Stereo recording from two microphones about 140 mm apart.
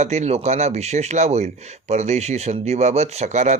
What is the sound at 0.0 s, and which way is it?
Speech, 55° right (ahead or behind).